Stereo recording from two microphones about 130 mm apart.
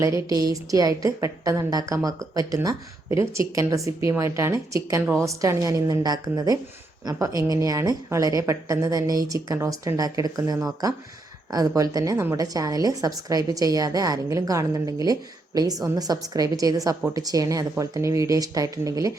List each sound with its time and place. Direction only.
0.0 s a woman's voice: 25° right (ahead or behind)